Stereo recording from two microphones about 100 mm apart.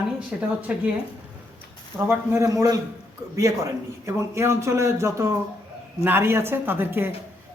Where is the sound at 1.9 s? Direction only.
25° right (ahead or behind).